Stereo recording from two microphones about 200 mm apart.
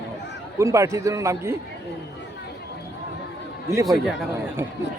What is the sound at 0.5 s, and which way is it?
A man's voice, 15° right (ahead or behind).